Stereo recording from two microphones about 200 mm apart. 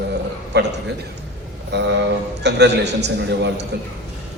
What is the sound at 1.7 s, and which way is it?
A man's voice, 60° right (ahead or behind).